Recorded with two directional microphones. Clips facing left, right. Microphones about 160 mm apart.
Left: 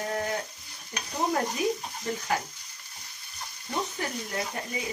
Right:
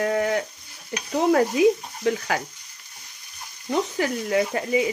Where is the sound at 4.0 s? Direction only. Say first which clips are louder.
Right 10 dB; 90° right.